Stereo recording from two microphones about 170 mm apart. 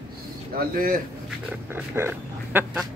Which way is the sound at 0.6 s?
55° right (ahead or behind).